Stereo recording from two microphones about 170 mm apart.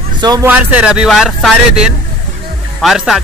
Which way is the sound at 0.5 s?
10° right (ahead or behind).